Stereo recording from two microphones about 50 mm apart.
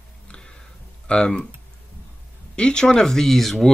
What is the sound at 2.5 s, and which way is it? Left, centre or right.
Speech, centre.